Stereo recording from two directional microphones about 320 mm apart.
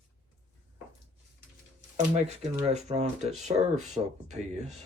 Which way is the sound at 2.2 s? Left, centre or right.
Centre.